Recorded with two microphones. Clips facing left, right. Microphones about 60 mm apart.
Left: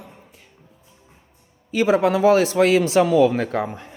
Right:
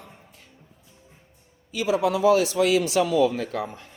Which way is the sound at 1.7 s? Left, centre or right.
Left.